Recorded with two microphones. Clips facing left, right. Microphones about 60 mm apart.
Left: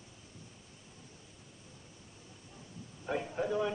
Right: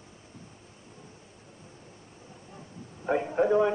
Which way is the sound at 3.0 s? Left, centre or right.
Right.